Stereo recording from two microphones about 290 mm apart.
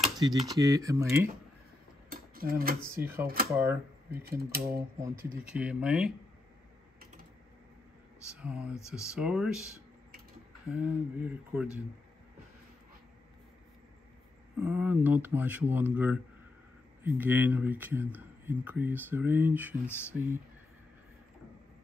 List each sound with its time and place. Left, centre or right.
0.0 s typewriter: centre
0.5 s speech: centre
2.0 s a sound: right
2.8 s speech: centre
4.3 s speech: right
5.0 s speech: centre
8.4 s speech: centre
8.7 s speech: centre
9.0 s speech: centre
14.6 s speech: centre
19.9 s speech: centre